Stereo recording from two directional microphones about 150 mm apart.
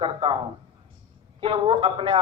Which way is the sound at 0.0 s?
35° right (ahead or behind).